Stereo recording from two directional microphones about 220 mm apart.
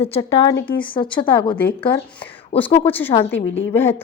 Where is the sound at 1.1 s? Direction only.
5° left (ahead or behind).